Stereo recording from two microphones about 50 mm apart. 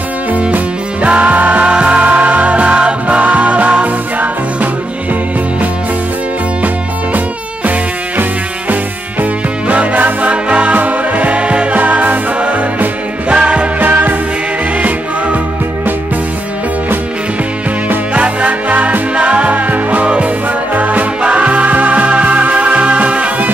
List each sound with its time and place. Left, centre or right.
0.3 s music: right
9.2 s music: right
13.7 s music: right
18.1 s music: right